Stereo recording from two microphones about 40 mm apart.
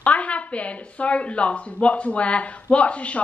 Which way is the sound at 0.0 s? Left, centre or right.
Left.